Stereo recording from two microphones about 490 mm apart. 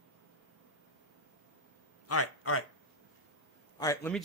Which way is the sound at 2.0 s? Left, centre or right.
Left.